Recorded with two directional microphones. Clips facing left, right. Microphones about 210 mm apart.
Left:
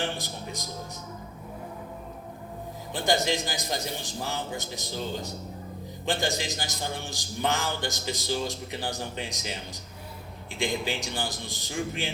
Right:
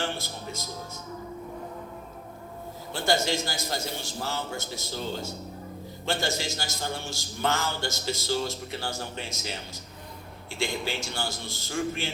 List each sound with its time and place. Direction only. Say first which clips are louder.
0.0 s a man's voice: even; 15° left (ahead or behind)
2.9 s a man's voice: even; 15° left (ahead or behind)